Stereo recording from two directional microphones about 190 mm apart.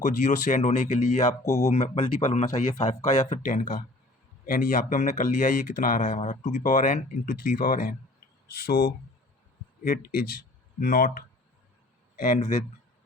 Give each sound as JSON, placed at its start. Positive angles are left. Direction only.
{"t": 0.0, "sound": "speech", "side_deg": 40}
{"t": 1.4, "sound": "speech", "side_deg": 15}
{"t": 1.7, "sound": "speech", "side_deg": 35}